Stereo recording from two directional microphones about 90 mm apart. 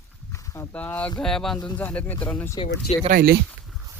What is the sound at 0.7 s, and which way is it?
Speech, 15° left (ahead or behind).